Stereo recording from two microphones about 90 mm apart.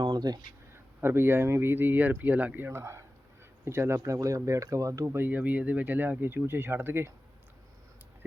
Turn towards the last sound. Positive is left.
turn(degrees=-25)  # may be behind; listen again after turning